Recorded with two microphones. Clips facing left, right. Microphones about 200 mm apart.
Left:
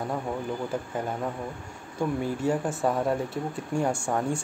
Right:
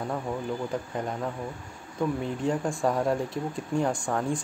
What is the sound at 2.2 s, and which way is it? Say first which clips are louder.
Speech: left 1 dB; 5° left (ahead or behind).